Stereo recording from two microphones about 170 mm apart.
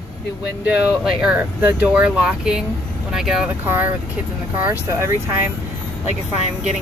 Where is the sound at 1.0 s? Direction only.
5° right (ahead or behind).